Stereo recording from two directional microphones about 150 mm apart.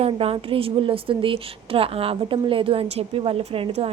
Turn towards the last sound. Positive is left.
turn(degrees=-40)  # may be behind; listen again after turning